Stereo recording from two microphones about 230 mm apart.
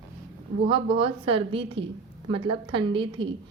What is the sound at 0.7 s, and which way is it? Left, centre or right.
A woman's voice, right.